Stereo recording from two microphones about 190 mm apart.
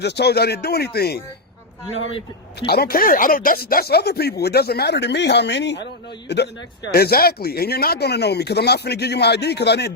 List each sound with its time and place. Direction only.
0.0 s speech: 60° left (ahead or behind)
1.9 s speech: 90° left
2.6 s speech: 55° left (ahead or behind)